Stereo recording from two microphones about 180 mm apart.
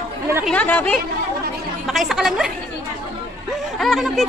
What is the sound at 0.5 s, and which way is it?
Speech, 10° left (ahead or behind).